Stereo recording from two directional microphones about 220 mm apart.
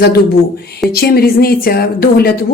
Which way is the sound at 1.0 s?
45° left (ahead or behind).